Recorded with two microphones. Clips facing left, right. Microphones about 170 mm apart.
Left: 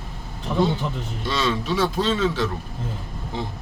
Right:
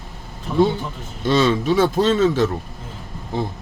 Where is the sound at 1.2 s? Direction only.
50° right (ahead or behind).